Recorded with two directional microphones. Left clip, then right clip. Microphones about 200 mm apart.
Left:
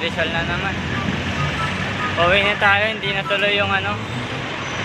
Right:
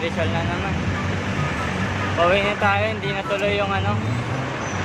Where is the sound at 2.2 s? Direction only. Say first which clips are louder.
Left 3 dB; 5° right (ahead or behind).